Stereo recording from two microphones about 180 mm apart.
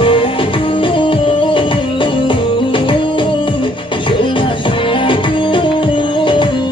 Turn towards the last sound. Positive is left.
turn(degrees=25)  # may be behind; listen again after turning